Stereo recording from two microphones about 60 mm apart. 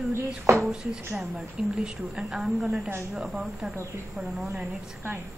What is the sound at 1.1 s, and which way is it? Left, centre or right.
A woman's voice, centre.